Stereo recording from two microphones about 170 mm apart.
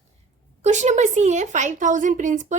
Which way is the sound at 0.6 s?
45° right (ahead or behind).